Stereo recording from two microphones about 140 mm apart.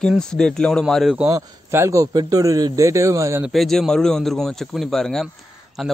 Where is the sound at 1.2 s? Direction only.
20° right (ahead or behind).